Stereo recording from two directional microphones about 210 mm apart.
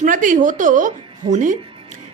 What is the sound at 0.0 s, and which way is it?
A woman's voice, 40° right (ahead or behind).